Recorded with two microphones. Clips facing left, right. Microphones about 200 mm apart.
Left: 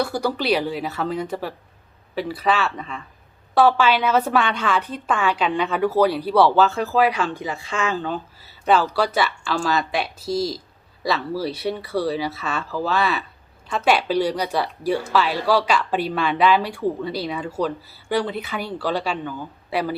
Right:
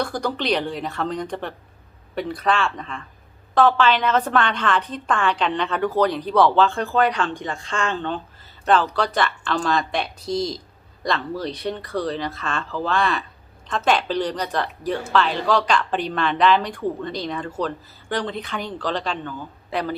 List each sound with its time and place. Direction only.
0.0 s a woman's voice: 10° left (ahead or behind)